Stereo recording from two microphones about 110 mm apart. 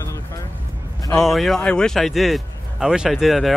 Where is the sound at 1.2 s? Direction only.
Centre (ahead or behind).